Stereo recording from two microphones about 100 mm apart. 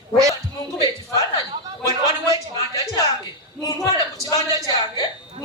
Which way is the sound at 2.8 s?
35° left (ahead or behind).